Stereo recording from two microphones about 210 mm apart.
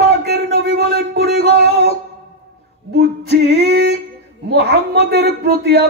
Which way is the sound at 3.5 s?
50° right (ahead or behind).